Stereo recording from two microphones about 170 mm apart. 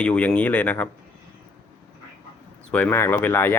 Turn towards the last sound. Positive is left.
turn(degrees=10)  # may be behind; listen again after turning